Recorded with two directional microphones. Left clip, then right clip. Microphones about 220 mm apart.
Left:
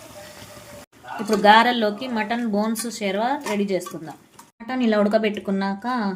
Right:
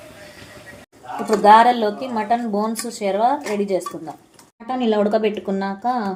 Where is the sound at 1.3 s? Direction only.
20° left (ahead or behind).